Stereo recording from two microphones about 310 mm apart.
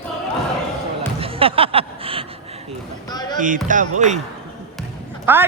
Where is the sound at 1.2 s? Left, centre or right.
Centre.